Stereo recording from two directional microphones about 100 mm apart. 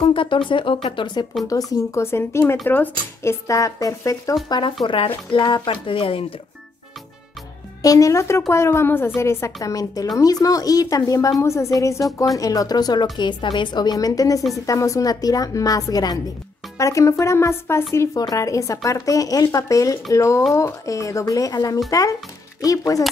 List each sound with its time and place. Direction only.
0.0 s a woman's voice: 55° left (ahead or behind)
1.4 s speech: 35° left (ahead or behind)
2.0 s a woman's voice: 25° left (ahead or behind)
3.2 s speech: 30° left (ahead or behind)
4.5 s a woman's voice: 55° left (ahead or behind)
7.8 s a woman's voice: 35° left (ahead or behind)